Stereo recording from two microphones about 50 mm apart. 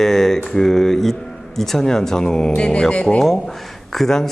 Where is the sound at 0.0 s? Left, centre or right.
Centre.